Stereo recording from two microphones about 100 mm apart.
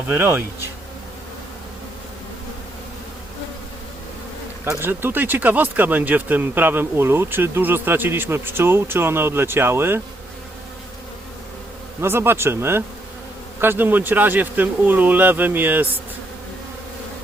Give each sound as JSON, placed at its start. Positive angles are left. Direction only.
{"t": 0.1, "sound": "speech", "side_deg": -20}
{"t": 4.8, "sound": "speech", "side_deg": -20}
{"t": 11.9, "sound": "speech", "side_deg": -25}